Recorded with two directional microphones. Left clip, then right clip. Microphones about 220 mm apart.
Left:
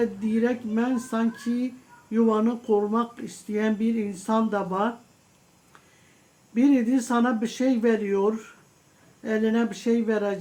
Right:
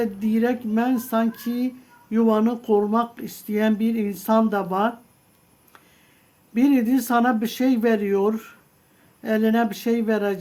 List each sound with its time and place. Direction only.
0.0 s speech: 45° right (ahead or behind)
6.5 s speech: 50° right (ahead or behind)